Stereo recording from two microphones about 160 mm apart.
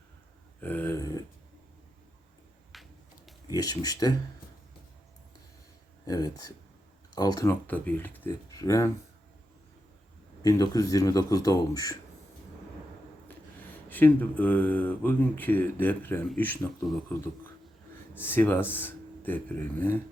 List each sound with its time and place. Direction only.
0.6 s a sound: 10° left (ahead or behind)
0.9 s a sound: 20° left (ahead or behind)
2.7 s a sound: centre (ahead or behind)
3.4 s a man's voice: 25° left (ahead or behind)
6.1 s a man's voice: 25° left (ahead or behind)
7.7 s a man's voice: 10° left (ahead or behind)
10.4 s a man's voice: 20° left (ahead or behind)
13.8 s speech: 10° left (ahead or behind)
18.1 s speech: 15° left (ahead or behind)